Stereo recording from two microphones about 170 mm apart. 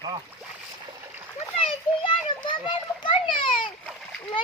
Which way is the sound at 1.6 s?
35° left (ahead or behind).